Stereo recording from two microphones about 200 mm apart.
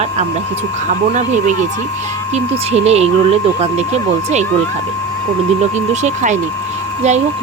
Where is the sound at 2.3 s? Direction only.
30° right (ahead or behind).